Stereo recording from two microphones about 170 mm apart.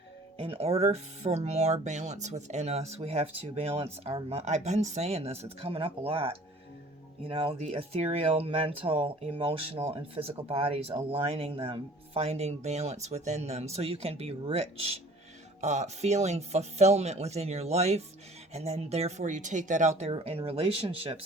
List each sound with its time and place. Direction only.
0.3 s speech: 35° right (ahead or behind)